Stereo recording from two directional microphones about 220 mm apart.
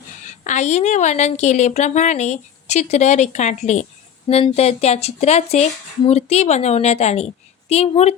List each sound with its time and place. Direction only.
0.4 s a woman's voice: 30° left (ahead or behind)